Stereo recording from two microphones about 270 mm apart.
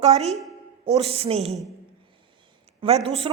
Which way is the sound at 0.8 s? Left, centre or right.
Right.